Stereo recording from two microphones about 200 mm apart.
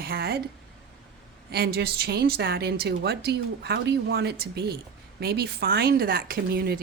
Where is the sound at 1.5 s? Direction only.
50° right (ahead or behind).